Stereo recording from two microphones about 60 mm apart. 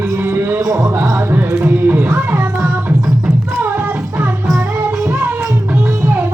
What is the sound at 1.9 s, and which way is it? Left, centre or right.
Music, right.